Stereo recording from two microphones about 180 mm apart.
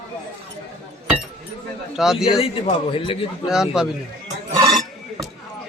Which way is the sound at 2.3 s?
30° left (ahead or behind).